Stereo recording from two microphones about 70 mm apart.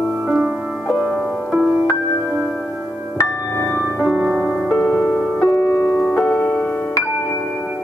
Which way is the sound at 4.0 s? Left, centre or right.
Centre.